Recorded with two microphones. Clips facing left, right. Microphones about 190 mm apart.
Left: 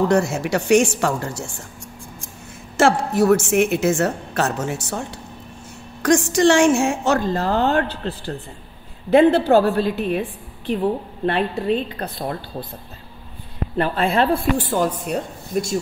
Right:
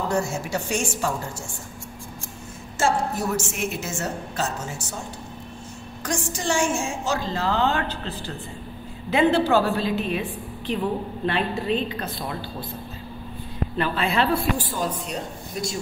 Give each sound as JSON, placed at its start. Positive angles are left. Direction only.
{"t": 0.1, "sound": "a woman's voice", "side_deg": 75}
{"t": 2.8, "sound": "a woman's voice", "side_deg": 70}
{"t": 6.0, "sound": "a woman's voice", "side_deg": 80}
{"t": 9.1, "sound": "a woman's voice", "side_deg": 55}
{"t": 11.2, "sound": "a woman's voice", "side_deg": 55}
{"t": 13.7, "sound": "speech", "side_deg": 50}